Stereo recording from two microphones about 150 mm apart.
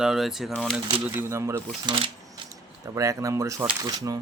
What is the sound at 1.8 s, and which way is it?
Speech, 35° right (ahead or behind).